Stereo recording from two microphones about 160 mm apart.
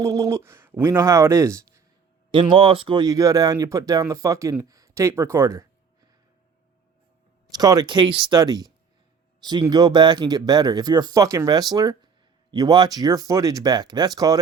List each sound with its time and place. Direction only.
0.0 s speech: 20° right (ahead or behind)
2.3 s speech: 35° right (ahead or behind)
4.7 s a sound: 20° right (ahead or behind)
7.5 s speech: 25° right (ahead or behind)